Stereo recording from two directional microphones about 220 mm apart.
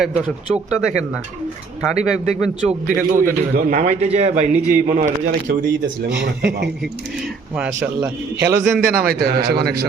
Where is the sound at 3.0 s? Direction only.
40° right (ahead or behind).